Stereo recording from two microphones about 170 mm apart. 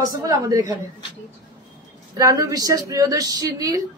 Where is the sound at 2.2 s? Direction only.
20° right (ahead or behind).